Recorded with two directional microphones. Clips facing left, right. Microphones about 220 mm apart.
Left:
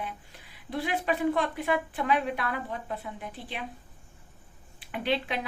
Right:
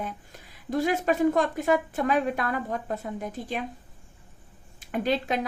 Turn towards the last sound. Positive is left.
turn(degrees=-45)  # may be behind; listen again after turning